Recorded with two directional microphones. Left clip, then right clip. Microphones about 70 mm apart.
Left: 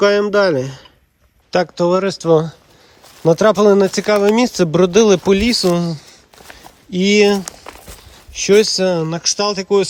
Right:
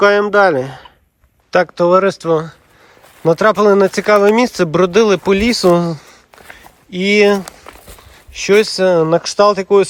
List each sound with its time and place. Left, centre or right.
0.0 s speech: left
2.2 s speech: left
3.2 s speech: left
3.8 s speech: left
5.4 s speech: centre
5.6 s speech: centre
7.1 s speech: left
7.5 s walk: centre
8.3 s speech: left
9.0 s speech: centre
9.5 s speech: centre